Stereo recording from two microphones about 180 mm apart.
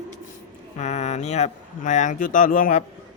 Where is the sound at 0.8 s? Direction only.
40° left (ahead or behind).